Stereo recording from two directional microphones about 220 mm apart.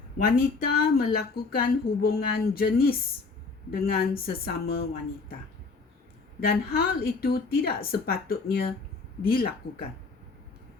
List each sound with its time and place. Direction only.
0.3 s speech: 45° left (ahead or behind)
6.4 s speech: 45° left (ahead or behind)